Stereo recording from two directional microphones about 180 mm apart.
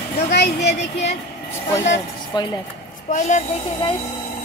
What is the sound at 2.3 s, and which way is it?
Speech, 25° left (ahead or behind).